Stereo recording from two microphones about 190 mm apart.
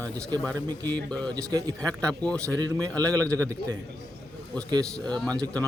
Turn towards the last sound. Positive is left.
turn(degrees=5)  # may be behind; listen again after turning